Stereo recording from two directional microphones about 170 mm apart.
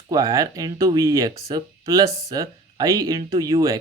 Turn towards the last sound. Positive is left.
turn(degrees=-20)  # may be behind; listen again after turning